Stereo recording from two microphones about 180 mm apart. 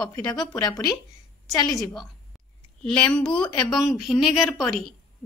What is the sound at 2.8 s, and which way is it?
A woman's voice, 5° left (ahead or behind).